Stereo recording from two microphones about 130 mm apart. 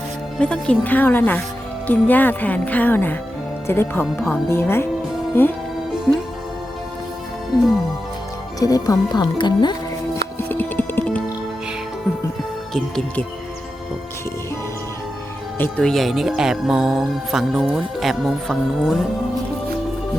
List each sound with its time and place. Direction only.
0.3 s speech: 10° left (ahead or behind)
8.5 s speech: 25° left (ahead or behind)
10.3 s music: 15° left (ahead or behind)
15.8 s music: centre (ahead or behind)